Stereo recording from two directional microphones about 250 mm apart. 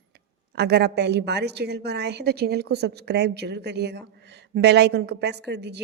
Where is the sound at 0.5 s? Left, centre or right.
Right.